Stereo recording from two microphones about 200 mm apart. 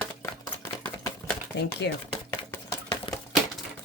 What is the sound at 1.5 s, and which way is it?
Speech, 55° left (ahead or behind).